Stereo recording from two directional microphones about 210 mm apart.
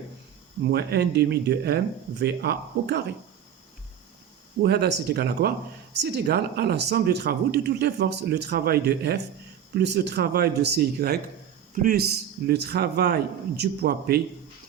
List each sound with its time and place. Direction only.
0.6 s speech: 50° right (ahead or behind)
4.6 s speech: 50° right (ahead or behind)